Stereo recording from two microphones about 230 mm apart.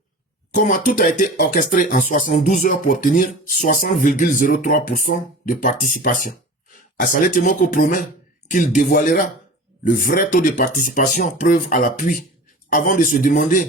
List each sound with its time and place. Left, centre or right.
0.5 s speech: left